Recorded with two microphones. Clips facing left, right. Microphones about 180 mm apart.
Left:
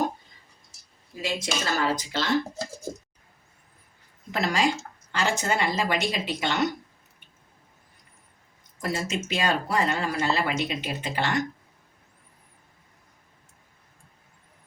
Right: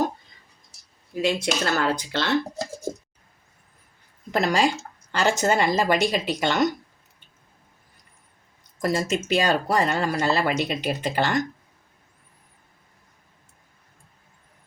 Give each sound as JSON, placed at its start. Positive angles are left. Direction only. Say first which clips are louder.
{"t": 1.1, "sound": "speech", "louder": "right 6 dB", "side_deg": -65}
{"t": 4.3, "sound": "speech", "louder": "right 3 dB", "side_deg": -40}
{"t": 8.8, "sound": "speech", "louder": "right 5 dB", "side_deg": -40}